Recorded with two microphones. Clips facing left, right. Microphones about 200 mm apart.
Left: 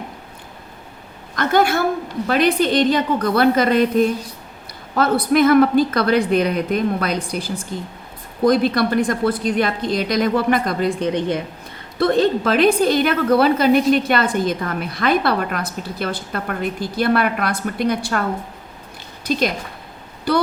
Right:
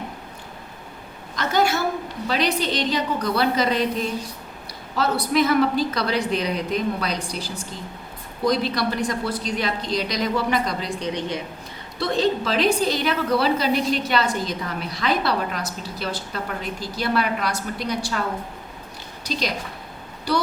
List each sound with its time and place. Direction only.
1.4 s a woman's voice: 55° left (ahead or behind)
20.3 s a woman's voice: 55° left (ahead or behind)